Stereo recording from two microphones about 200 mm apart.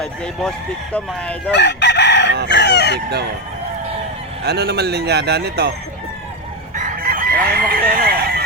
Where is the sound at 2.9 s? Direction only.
55° right (ahead or behind).